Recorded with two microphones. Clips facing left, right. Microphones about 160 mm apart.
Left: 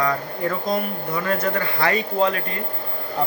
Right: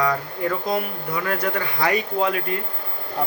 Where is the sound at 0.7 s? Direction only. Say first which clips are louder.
Left 1 dB; 10° right (ahead or behind).